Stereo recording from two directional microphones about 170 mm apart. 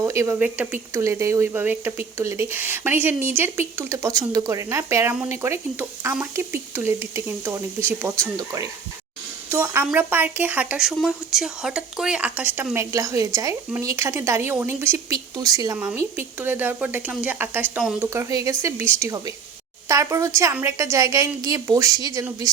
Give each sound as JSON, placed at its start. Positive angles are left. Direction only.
{"t": 0.0, "sound": "a woman's voice", "side_deg": -15}
{"t": 15.8, "sound": "a woman's voice", "side_deg": -10}